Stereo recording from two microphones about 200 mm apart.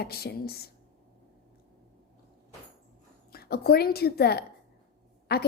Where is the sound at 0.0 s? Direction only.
50° left (ahead or behind).